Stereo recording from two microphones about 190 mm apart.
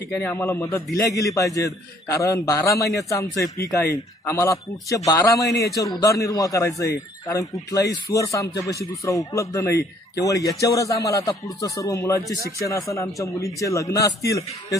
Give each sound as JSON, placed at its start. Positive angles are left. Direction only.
{"t": 0.1, "sound": "a man's voice", "side_deg": 10}